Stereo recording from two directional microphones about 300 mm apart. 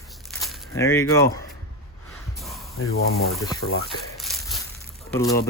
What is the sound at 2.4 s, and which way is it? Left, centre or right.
Spray, centre.